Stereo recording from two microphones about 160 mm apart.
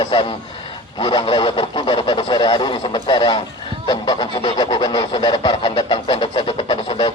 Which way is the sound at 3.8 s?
25° left (ahead or behind).